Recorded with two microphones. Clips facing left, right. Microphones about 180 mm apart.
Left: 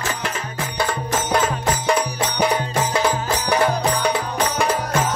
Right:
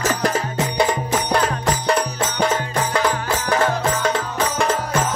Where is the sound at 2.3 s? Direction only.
15° left (ahead or behind).